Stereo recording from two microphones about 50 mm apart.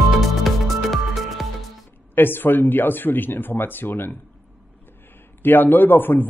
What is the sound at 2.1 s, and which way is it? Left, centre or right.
Speech, left.